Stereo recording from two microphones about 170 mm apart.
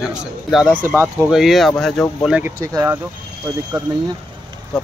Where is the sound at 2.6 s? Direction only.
20° right (ahead or behind).